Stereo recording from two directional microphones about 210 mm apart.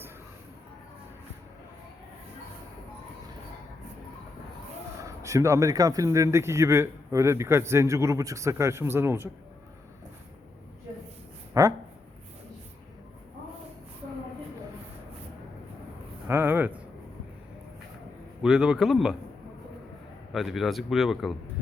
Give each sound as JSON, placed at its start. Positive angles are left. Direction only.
{"t": 5.0, "sound": "speech", "side_deg": -15}
{"t": 11.6, "sound": "speech", "side_deg": -15}
{"t": 16.2, "sound": "a sound", "side_deg": -10}
{"t": 18.4, "sound": "speech", "side_deg": -5}
{"t": 20.3, "sound": "speech", "side_deg": 0}